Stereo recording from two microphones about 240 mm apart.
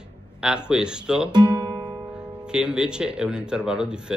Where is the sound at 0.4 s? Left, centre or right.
Centre.